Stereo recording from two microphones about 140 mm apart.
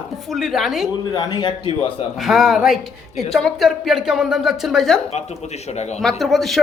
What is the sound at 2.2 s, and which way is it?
Speech, 5° right (ahead or behind).